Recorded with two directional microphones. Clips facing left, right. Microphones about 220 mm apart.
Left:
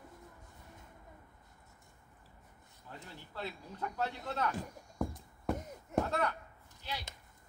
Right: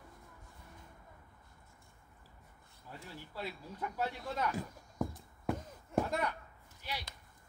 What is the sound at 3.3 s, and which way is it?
Speech, 10° right (ahead or behind).